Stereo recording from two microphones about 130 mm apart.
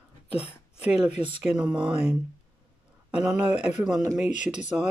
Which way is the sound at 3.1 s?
10° right (ahead or behind).